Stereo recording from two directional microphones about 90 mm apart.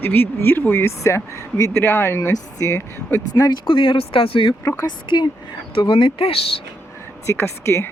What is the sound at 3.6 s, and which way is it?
Speech, 70° left (ahead or behind).